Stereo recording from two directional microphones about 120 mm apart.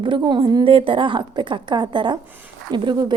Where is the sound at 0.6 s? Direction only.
50° right (ahead or behind).